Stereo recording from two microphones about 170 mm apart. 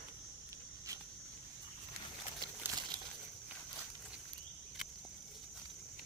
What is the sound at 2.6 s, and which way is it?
Crumpling, 10° right (ahead or behind).